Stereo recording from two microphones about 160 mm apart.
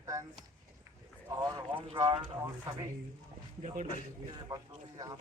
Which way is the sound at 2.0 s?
25° right (ahead or behind).